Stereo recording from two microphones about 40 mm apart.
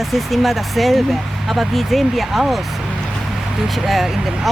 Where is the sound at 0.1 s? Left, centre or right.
Centre.